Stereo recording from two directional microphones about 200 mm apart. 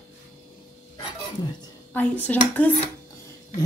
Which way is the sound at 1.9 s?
10° left (ahead or behind).